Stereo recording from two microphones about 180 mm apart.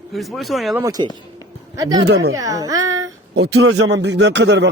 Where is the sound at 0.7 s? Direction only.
20° right (ahead or behind).